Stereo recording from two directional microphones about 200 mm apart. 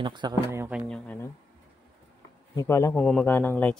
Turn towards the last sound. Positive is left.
turn(degrees=10)  # may be behind; listen again after turning